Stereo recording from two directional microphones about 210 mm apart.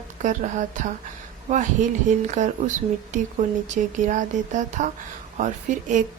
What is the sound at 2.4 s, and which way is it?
Speech, 35° right (ahead or behind).